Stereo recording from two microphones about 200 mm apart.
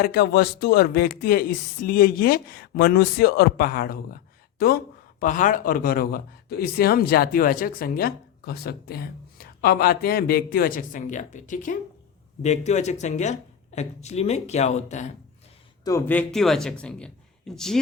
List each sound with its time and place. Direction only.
0.0 s a man's voice: 50° left (ahead or behind); by 15.0 s 35° left (ahead or behind)
15.8 s speech: 15° left (ahead or behind)